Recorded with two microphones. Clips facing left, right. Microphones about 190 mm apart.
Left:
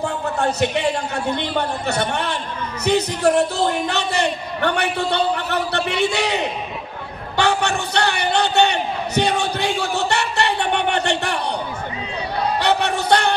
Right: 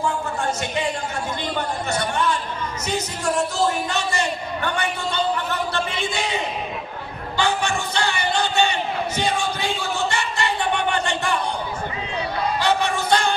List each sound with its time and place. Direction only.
0.0 s a man's voice: 65° left (ahead or behind)
7.3 s a sound: 65° left (ahead or behind)
12.5 s music: 65° left (ahead or behind)